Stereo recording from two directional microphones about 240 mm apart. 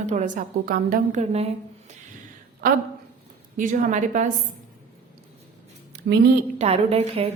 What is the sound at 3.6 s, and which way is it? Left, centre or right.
Speech, right.